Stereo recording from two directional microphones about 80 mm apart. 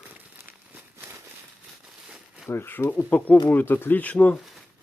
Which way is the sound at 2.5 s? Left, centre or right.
Left.